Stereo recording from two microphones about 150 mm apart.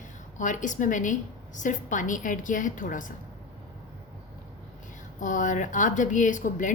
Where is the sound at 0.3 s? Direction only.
55° left (ahead or behind).